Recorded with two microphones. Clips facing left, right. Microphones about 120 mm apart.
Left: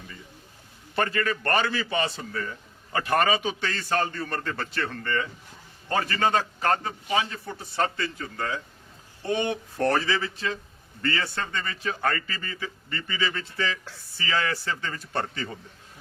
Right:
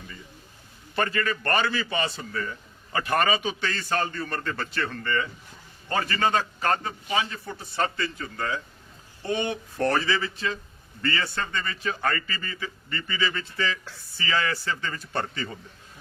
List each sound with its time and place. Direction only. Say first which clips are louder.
0.9 s a man's voice: even; 40° left (ahead or behind)